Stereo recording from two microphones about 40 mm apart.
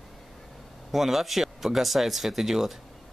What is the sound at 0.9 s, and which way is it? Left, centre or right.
Speech, centre.